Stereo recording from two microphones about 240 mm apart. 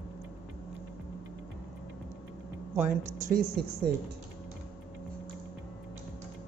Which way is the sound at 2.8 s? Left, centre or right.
Right.